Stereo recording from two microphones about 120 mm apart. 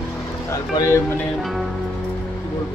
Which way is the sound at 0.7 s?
25° left (ahead or behind).